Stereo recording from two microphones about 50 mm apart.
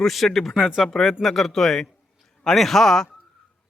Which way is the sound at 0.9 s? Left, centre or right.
Centre.